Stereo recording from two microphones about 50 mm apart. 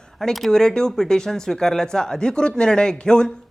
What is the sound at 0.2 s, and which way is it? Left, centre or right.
Speech, centre.